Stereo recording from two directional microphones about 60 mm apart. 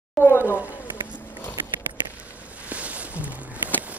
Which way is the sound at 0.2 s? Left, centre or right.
Left.